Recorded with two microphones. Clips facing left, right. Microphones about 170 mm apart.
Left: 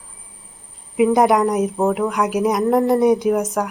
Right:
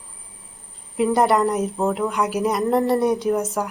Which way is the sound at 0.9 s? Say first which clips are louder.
Left 3 dB; 15° left (ahead or behind).